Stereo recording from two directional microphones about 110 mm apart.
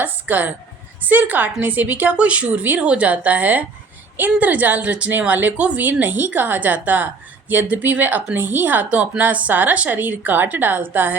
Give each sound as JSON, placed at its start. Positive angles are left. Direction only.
{"t": 0.0, "sound": "speech", "side_deg": -15}